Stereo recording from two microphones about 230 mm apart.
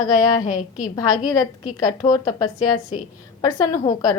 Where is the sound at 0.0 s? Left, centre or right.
Centre.